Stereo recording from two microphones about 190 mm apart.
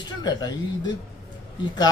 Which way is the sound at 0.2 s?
20° left (ahead or behind).